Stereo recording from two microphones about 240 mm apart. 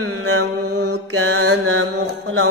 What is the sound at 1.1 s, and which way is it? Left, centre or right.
Mantra, right.